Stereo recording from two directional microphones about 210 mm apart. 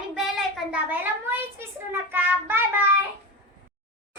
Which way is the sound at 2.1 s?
10° right (ahead or behind).